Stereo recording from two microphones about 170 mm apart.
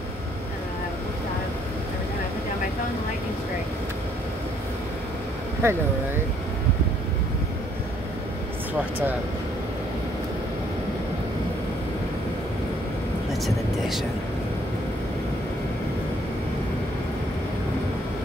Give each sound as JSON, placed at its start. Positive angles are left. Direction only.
{"t": 5.6, "sound": "speech", "side_deg": -15}